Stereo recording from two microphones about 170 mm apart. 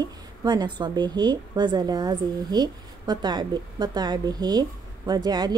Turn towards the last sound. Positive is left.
turn(degrees=-25)  # may be behind; listen again after turning